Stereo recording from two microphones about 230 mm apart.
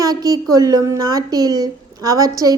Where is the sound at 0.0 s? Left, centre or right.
Centre.